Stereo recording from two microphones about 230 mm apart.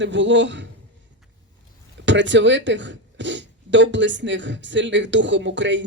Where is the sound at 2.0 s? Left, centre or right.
Right.